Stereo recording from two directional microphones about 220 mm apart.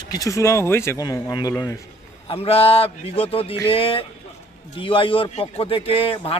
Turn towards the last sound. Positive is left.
turn(degrees=25)  # may be behind; listen again after turning